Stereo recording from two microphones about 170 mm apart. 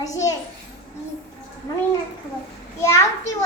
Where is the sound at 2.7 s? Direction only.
15° left (ahead or behind).